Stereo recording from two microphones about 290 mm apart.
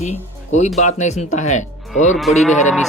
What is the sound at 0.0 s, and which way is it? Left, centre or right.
Speech, left.